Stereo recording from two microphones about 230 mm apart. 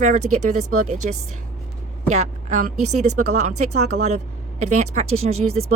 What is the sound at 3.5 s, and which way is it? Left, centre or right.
Speech, right.